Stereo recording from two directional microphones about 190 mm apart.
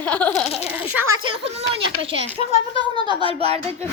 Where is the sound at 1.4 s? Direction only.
30° right (ahead or behind).